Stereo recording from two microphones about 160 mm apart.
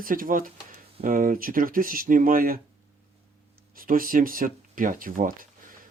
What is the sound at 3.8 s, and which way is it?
Speech, 60° right (ahead or behind).